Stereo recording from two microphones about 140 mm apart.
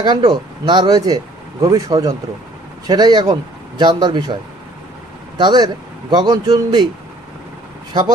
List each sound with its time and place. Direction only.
0.0 s speech: 30° right (ahead or behind)
5.4 s speech: 30° right (ahead or behind)